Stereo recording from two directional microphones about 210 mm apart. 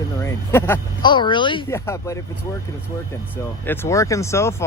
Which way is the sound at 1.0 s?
20° left (ahead or behind).